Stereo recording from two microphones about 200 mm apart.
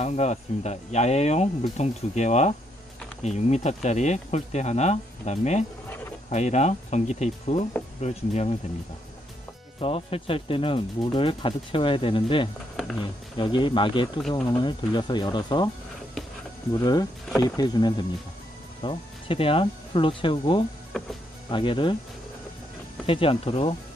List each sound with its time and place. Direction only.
0.0 s speech: 35° left (ahead or behind)
9.8 s speech: 30° left (ahead or behind)
16.8 s speech: 20° left (ahead or behind)
23.0 s speech: 25° left (ahead or behind)